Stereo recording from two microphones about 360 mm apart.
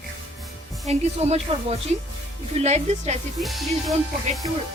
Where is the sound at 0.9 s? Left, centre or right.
Centre.